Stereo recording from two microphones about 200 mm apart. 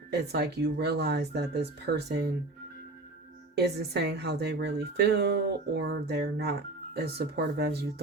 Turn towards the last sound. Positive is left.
turn(degrees=-55)  # may be behind; listen again after turning